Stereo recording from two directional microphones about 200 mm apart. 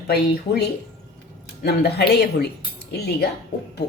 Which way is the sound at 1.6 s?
55° left (ahead or behind).